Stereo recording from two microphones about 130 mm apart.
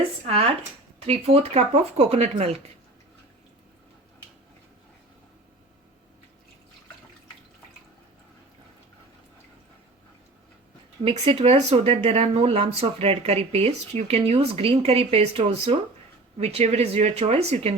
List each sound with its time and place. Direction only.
0.9 s speech: 50° right (ahead or behind)
11.1 s speech: 45° right (ahead or behind)